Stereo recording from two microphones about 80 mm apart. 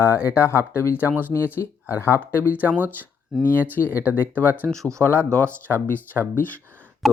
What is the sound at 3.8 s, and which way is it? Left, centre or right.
Speech, right.